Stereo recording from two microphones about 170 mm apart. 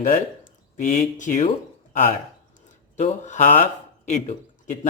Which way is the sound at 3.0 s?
45° left (ahead or behind).